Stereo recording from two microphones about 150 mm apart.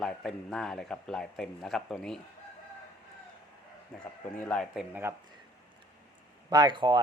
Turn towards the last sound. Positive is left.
turn(degrees=-30)  # may be behind; listen again after turning